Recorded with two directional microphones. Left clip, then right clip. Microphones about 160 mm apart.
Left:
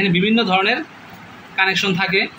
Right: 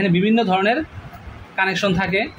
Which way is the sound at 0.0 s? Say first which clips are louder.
Left 1 dB; 90° right.